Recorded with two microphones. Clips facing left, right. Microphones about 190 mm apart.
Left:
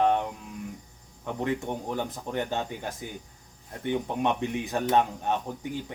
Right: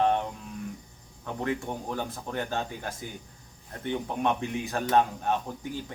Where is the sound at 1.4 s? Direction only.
15° left (ahead or behind).